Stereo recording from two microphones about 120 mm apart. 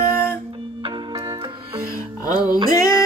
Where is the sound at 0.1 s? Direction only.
20° left (ahead or behind).